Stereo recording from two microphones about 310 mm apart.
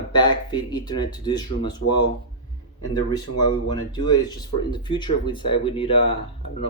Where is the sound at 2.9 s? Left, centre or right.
Centre.